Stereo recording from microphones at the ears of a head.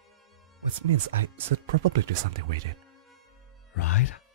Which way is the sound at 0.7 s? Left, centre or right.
Right.